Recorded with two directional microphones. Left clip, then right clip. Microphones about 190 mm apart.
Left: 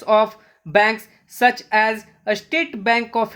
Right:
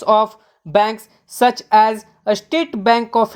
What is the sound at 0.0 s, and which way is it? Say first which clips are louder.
Speech: right 2 dB; 20° right (ahead or behind).